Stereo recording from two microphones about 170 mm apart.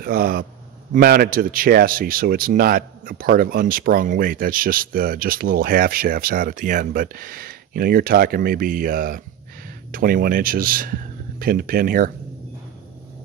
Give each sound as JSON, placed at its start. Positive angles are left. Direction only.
{"t": 0.0, "sound": "a man's voice", "side_deg": -60}